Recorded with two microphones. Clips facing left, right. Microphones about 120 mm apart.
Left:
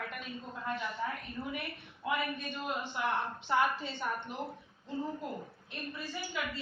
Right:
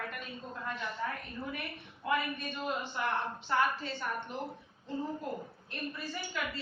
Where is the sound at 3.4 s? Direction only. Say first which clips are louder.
Left 1 dB; 15° left (ahead or behind).